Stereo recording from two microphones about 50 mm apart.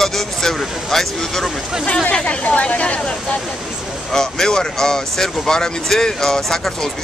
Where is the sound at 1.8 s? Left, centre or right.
Centre.